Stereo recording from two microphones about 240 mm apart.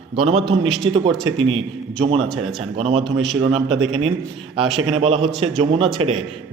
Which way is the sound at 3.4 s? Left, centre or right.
Right.